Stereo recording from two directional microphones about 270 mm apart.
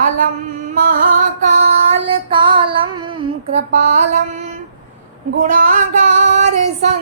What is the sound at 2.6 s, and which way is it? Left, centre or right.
Female singing, centre.